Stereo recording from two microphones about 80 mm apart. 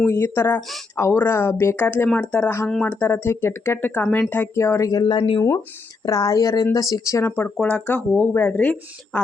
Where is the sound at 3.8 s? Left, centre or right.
Left.